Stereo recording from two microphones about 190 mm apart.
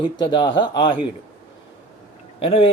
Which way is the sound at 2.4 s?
30° left (ahead or behind).